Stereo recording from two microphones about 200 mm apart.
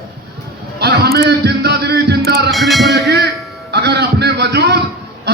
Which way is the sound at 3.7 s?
55° right (ahead or behind).